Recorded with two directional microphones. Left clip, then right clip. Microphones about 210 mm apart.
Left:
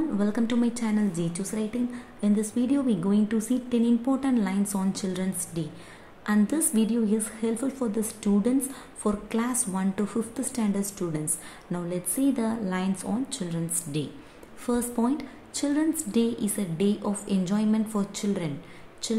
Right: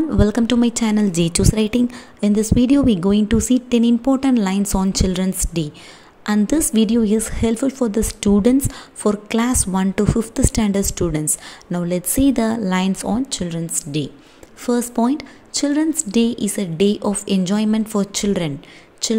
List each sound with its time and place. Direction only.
0.2 s a woman's voice: 35° right (ahead or behind)